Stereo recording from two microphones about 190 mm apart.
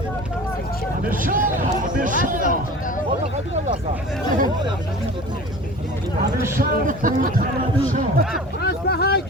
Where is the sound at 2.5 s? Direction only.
45° left (ahead or behind).